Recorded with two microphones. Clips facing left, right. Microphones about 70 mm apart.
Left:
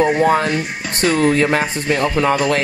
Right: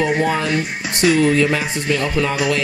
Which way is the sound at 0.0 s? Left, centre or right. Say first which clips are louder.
Left 4 dB; left.